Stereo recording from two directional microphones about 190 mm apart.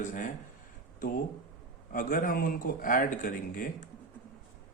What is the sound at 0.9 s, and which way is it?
Speech, 45° left (ahead or behind).